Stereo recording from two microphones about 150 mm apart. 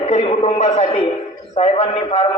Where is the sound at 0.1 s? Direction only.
45° left (ahead or behind).